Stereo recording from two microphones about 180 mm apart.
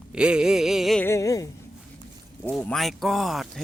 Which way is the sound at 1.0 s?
15° left (ahead or behind).